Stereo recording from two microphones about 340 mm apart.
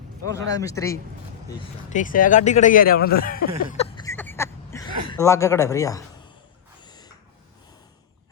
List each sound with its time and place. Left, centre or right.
0.3 s speech: centre
1.9 s speech: left
3.6 s a sound: left